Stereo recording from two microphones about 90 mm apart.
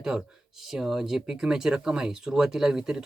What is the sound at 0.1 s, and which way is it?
Speech, 5° right (ahead or behind).